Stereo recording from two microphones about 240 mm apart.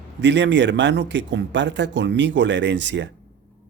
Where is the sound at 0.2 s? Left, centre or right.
Right.